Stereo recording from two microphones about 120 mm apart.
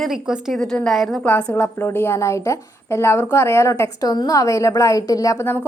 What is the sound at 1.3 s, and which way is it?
A woman's voice, 15° left (ahead or behind).